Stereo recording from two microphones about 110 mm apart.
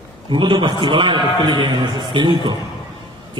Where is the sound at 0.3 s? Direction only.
45° right (ahead or behind).